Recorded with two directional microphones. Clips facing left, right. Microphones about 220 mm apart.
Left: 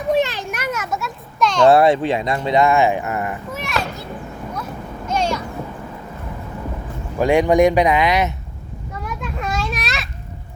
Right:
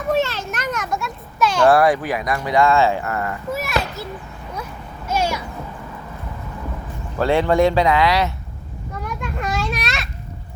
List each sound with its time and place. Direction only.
0.1 s children playing: 15° left (ahead or behind); by 1.6 s 5° right (ahead or behind)
1.6 s speech: 25° left (ahead or behind)
3.5 s speech: 5° right (ahead or behind)
5.0 s a sound: 5° right (ahead or behind)
7.2 s speech: 15° left (ahead or behind)
8.9 s children playing: centre (ahead or behind)